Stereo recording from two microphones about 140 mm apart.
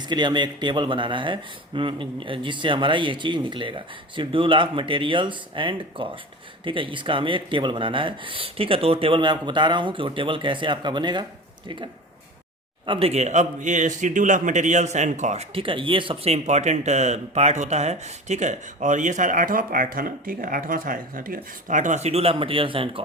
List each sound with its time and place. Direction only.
0.0 s speech: 30° right (ahead or behind)
12.8 s a man's voice: 40° right (ahead or behind)